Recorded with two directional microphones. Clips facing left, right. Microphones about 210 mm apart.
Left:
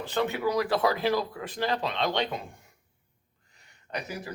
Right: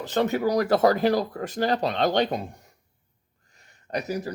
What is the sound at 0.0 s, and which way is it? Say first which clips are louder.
A man's voice: right 4 dB; 40° right (ahead or behind).